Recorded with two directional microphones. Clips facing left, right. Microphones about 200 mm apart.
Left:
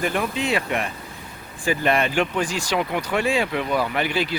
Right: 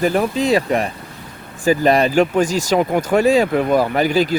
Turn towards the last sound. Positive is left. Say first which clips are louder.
# right 8 dB
turn(degrees=-40)  # may be behind; listen again after turning